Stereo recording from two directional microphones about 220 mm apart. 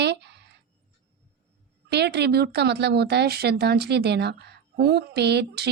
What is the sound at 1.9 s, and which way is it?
Speech, 50° right (ahead or behind).